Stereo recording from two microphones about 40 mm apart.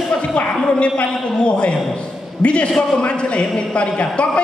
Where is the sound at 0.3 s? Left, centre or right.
Left.